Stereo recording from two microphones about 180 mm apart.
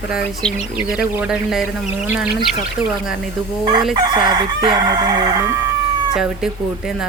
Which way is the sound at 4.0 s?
25° right (ahead or behind).